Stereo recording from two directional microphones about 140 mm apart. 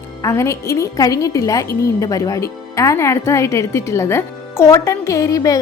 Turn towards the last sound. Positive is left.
turn(degrees=25)  # may be behind; listen again after turning